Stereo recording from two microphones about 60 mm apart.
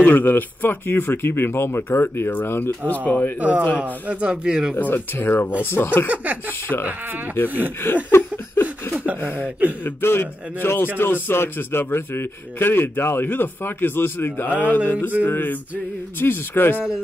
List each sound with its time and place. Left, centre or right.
0.0 s speech: left
3.1 s speech: left
3.3 s speech: right
4.7 s speech: left
7.4 s speech: right
7.8 s a sound: left
9.4 s speech: right
9.8 s speech: left